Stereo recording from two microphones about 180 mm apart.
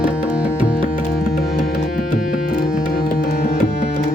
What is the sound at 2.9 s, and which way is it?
Tabla, 60° left (ahead or behind).